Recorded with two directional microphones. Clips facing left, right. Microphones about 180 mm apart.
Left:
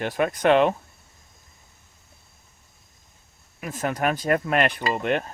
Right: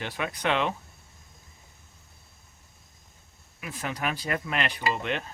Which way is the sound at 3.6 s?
45° left (ahead or behind).